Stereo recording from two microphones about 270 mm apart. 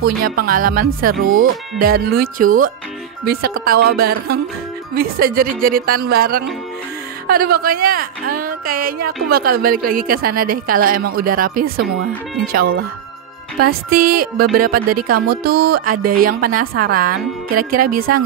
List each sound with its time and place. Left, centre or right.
0.0 s a woman's voice: right
13.8 s speech: right
14.1 s a woman's voice: right